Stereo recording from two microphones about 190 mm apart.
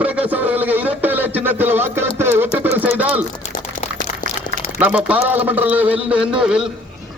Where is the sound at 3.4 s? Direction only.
35° left (ahead or behind).